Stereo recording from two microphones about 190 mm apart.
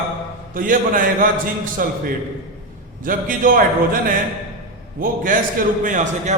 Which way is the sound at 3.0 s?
45° right (ahead or behind).